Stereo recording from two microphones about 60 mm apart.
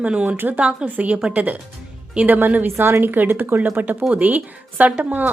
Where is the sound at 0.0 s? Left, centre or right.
Right.